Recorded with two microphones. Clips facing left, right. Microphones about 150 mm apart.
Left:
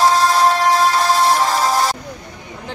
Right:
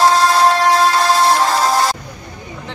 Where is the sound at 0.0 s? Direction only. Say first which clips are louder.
Right 2 dB; 75° right (ahead or behind).